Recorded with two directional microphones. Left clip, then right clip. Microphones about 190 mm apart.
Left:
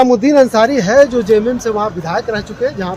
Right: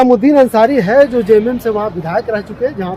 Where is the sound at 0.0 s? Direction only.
30° right (ahead or behind).